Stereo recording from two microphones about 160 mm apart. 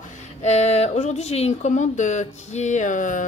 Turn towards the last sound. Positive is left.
turn(degrees=55)  # may be behind; listen again after turning